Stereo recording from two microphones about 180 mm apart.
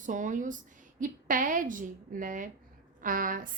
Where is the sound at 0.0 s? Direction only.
45° right (ahead or behind).